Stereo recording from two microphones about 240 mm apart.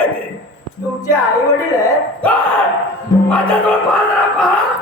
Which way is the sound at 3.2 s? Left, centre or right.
Centre.